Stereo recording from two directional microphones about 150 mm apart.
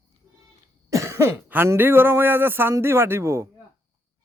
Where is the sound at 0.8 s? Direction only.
20° right (ahead or behind).